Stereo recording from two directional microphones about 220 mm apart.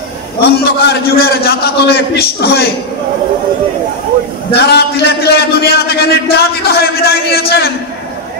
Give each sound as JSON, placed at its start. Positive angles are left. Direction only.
{"t": 0.4, "sound": "a man's voice", "side_deg": 45}
{"t": 4.6, "sound": "a man's voice", "side_deg": 45}